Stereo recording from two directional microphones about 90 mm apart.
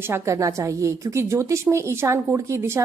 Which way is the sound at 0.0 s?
30° right (ahead or behind).